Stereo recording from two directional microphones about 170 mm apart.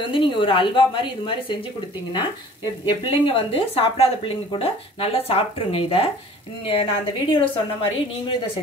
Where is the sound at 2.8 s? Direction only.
25° left (ahead or behind).